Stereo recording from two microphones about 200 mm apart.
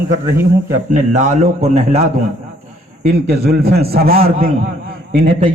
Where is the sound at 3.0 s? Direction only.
50° right (ahead or behind).